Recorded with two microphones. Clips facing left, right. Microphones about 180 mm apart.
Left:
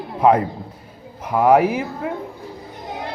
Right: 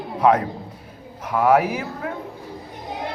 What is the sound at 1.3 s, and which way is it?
Speech, 15° left (ahead or behind).